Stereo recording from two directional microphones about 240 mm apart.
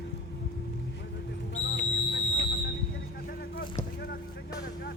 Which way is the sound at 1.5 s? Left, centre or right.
Left.